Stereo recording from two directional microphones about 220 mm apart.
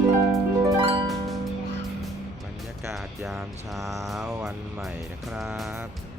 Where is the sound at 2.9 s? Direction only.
Centre (ahead or behind).